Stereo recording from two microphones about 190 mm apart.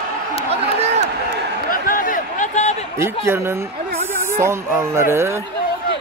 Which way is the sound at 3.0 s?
15° right (ahead or behind).